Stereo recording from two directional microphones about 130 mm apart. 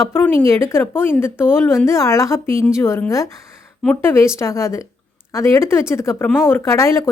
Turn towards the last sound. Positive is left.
turn(degrees=20)  # may be behind; listen again after turning